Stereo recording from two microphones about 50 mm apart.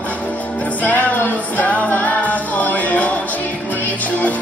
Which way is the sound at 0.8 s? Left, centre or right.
Left.